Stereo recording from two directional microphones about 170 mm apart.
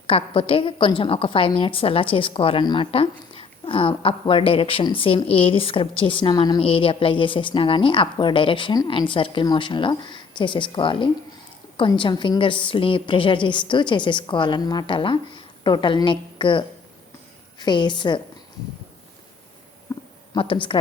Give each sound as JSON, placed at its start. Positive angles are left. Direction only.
{"t": 0.1, "sound": "a woman's voice", "side_deg": 30}
{"t": 19.9, "sound": "a sound", "side_deg": 20}
{"t": 20.3, "sound": "a woman's voice", "side_deg": 30}